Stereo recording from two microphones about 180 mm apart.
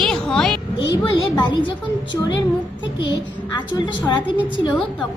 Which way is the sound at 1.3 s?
25° left (ahead or behind).